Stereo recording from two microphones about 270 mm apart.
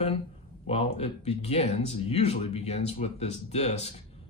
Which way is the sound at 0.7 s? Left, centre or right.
Left.